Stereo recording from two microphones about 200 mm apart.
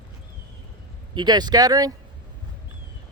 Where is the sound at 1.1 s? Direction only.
20° right (ahead or behind).